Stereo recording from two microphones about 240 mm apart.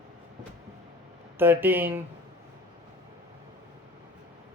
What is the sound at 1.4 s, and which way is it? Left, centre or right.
Speech, centre.